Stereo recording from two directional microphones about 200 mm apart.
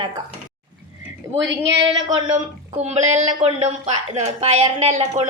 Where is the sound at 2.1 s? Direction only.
30° right (ahead or behind).